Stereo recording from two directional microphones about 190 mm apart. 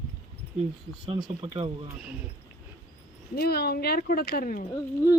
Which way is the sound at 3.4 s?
55° left (ahead or behind).